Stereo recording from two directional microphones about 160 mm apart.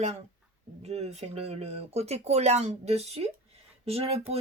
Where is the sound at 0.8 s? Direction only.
40° right (ahead or behind).